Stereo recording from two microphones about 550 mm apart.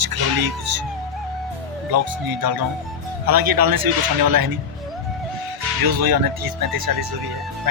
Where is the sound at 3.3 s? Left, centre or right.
Right.